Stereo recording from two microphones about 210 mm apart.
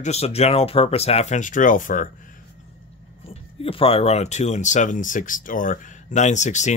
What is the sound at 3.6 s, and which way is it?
Speech, 25° left (ahead or behind).